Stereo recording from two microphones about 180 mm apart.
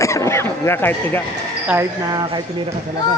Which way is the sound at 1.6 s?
15° right (ahead or behind).